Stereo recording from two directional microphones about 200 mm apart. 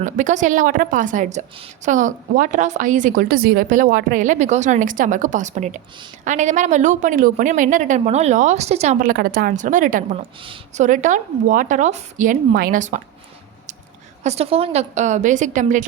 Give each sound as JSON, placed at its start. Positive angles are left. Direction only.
{"t": 0.0, "sound": "a woman's voice", "side_deg": -40}
{"t": 10.2, "sound": "a woman's voice", "side_deg": -25}
{"t": 10.8, "sound": "a woman's voice", "side_deg": -40}
{"t": 14.3, "sound": "a woman's voice", "side_deg": -30}